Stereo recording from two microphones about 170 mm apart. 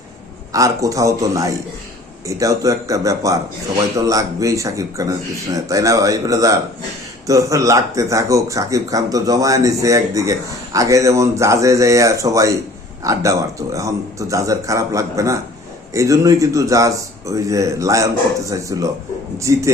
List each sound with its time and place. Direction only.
0.5 s a man's voice: 20° right (ahead or behind)